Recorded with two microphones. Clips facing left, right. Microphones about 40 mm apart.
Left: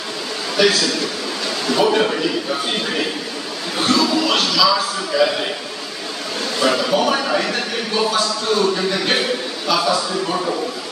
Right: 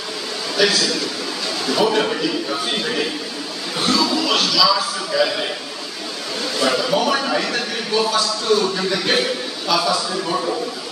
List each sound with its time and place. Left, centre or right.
0.6 s a man's voice: centre
6.6 s a man's voice: centre